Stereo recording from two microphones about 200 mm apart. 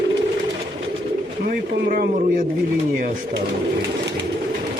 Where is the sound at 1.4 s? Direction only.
45° right (ahead or behind).